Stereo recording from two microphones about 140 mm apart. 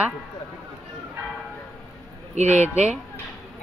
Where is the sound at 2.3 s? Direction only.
55° right (ahead or behind).